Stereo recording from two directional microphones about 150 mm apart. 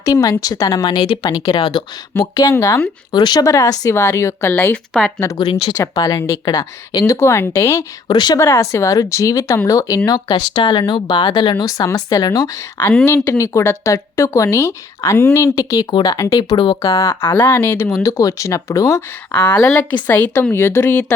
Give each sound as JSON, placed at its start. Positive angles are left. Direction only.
{"t": 0.0, "sound": "a woman's voice", "side_deg": 25}
{"t": 8.4, "sound": "a woman's voice", "side_deg": 20}
{"t": 12.8, "sound": "speech", "side_deg": 5}
{"t": 13.1, "sound": "a woman's voice", "side_deg": 20}
{"t": 16.4, "sound": "speech", "side_deg": 35}
{"t": 16.9, "sound": "speech", "side_deg": 20}